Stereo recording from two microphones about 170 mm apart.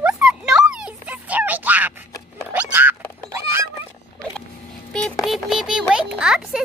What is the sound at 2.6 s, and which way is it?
Cat, 10° right (ahead or behind).